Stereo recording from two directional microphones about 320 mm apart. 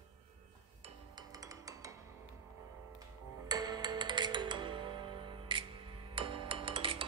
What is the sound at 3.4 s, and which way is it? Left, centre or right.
Music, centre.